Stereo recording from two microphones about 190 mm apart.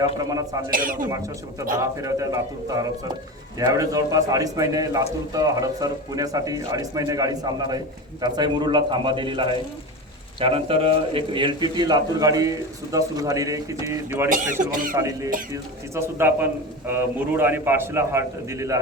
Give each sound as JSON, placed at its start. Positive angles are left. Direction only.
{"t": 0.2, "sound": "a man's voice", "side_deg": -20}
{"t": 0.7, "sound": "speech", "side_deg": -45}
{"t": 1.1, "sound": "a man's voice", "side_deg": -15}
{"t": 14.3, "sound": "speech", "side_deg": -40}
{"t": 14.9, "sound": "a man's voice", "side_deg": -15}